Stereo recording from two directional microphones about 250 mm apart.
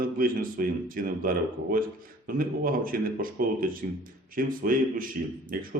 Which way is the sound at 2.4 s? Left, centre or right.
Right.